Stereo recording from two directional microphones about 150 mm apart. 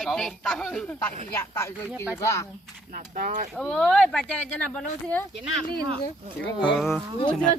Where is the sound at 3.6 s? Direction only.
5° left (ahead or behind).